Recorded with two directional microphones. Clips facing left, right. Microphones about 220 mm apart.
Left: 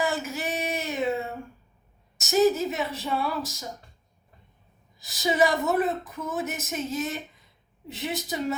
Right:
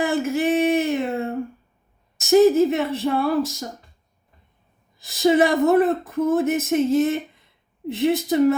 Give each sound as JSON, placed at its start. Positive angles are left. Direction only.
{"t": 0.0, "sound": "a sound", "side_deg": -55}
{"t": 2.3, "sound": "speech", "side_deg": -55}
{"t": 4.9, "sound": "speech", "side_deg": -55}